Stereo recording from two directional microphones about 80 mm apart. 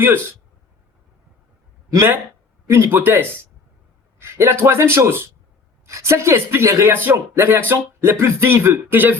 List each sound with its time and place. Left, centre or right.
1.9 s speech: right